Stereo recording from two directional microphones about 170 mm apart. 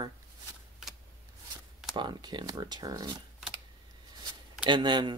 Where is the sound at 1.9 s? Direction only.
25° right (ahead or behind).